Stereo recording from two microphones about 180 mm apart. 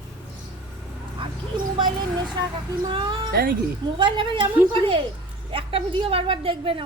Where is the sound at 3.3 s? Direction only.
60° right (ahead or behind).